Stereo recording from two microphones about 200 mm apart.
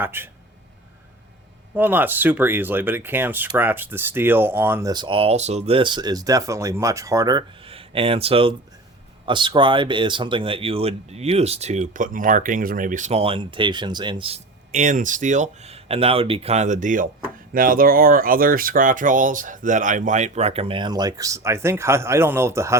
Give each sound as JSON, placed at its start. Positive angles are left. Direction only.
{"t": 0.0, "sound": "speech", "side_deg": -10}
{"t": 1.7, "sound": "speech", "side_deg": -10}